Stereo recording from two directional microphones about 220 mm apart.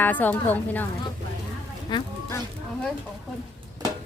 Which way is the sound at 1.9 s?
20° left (ahead or behind).